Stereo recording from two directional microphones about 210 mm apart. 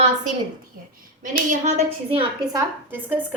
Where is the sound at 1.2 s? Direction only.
40° right (ahead or behind).